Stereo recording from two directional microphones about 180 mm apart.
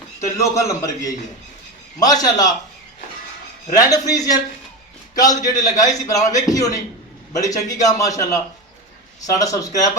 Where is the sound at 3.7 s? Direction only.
20° left (ahead or behind).